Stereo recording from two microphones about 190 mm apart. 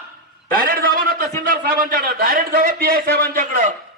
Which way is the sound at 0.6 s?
50° right (ahead or behind).